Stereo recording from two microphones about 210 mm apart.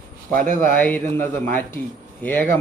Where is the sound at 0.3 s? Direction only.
40° right (ahead or behind).